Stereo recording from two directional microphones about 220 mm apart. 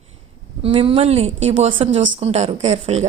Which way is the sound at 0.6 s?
25° right (ahead or behind).